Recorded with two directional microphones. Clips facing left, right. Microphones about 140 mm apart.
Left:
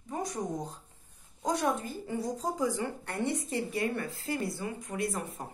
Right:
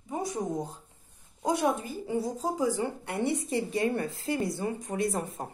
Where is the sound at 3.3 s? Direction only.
25° right (ahead or behind).